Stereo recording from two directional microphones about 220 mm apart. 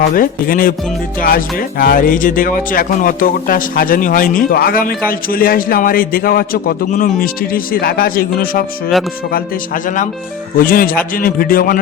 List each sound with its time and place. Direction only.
0.1 s speech: 40° left (ahead or behind)
10.6 s speech: 40° left (ahead or behind)